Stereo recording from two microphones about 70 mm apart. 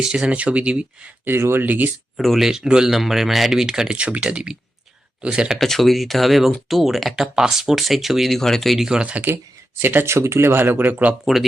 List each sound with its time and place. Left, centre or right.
0.0 s speech: centre
1.2 s speech: right
2.1 s speech: centre
5.5 s speech: centre
8.9 s speech: centre
9.8 s speech: right